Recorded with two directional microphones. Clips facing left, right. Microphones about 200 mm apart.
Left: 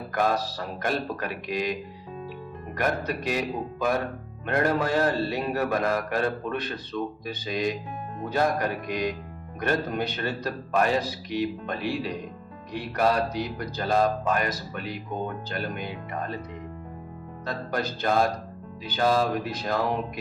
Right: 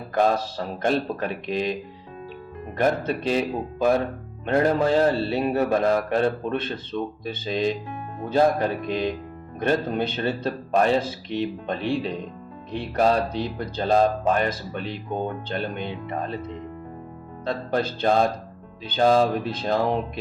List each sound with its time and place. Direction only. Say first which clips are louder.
0.1 s speech: right 4 dB; 25° right (ahead or behind)
2.7 s speech: right 5 dB; 25° right (ahead or behind)
17.4 s speech: right 5 dB; 25° right (ahead or behind)